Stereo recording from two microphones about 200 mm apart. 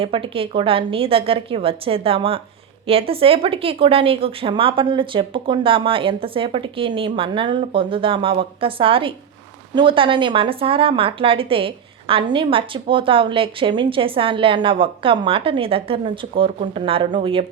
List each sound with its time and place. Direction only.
0.0 s speech: 25° right (ahead or behind)